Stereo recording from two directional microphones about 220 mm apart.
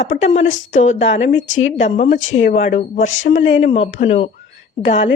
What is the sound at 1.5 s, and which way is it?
Speech, 60° left (ahead or behind).